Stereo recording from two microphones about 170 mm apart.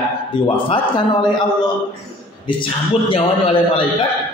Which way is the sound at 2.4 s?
30° left (ahead or behind).